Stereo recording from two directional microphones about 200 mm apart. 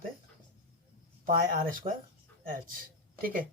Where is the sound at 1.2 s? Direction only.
45° right (ahead or behind).